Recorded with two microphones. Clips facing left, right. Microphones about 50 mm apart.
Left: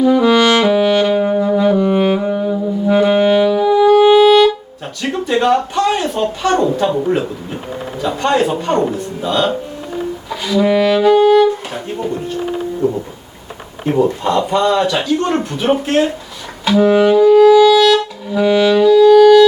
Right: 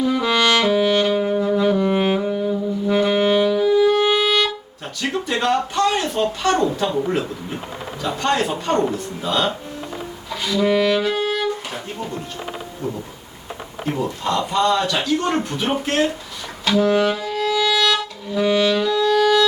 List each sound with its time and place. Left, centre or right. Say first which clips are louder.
0.0 s brass instrument: left 7 dB; centre
1.5 s music: left 5 dB; centre
2.2 s saxophone: left 4 dB; centre
3.8 s music: left 12 dB; centre
4.9 s a sound: left 3 dB; centre
5.3 s a man's voice: left 7 dB; centre
9.2 s speech: left 5 dB; centre
13.8 s a man's voice: left 8 dB; left
16.6 s music: left 6 dB; centre